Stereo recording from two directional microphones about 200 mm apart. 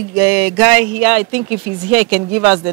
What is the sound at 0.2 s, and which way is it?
Speech, 10° right (ahead or behind).